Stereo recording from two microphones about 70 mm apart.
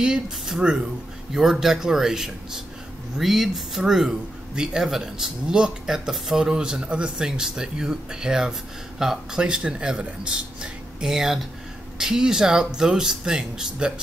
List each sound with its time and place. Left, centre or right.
0.0 s speech: centre